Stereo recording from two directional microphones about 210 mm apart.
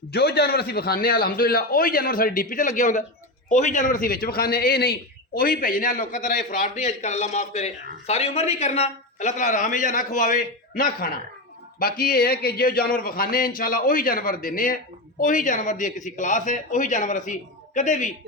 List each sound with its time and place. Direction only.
0.1 s a man's voice: 50° left (ahead or behind)